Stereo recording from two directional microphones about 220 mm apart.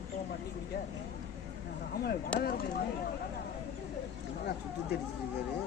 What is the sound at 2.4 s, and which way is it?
Speech, 45° left (ahead or behind).